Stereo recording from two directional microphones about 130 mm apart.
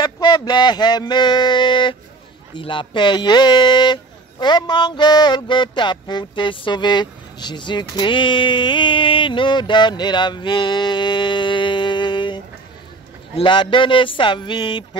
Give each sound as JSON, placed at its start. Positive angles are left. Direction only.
{"t": 0.0, "sound": "speech", "side_deg": 35}
{"t": 13.4, "sound": "speech", "side_deg": 35}